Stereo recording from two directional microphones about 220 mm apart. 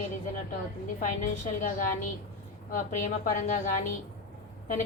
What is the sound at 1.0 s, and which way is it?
A woman's voice, 35° left (ahead or behind).